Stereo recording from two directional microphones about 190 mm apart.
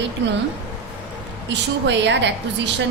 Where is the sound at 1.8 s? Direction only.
70° right (ahead or behind).